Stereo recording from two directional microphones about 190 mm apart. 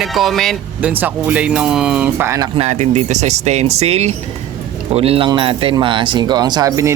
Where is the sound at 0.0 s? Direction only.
Centre (ahead or behind).